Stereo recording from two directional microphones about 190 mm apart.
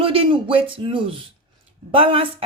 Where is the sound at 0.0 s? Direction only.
25° right (ahead or behind).